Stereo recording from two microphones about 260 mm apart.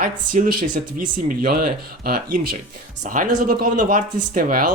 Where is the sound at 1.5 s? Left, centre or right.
Right.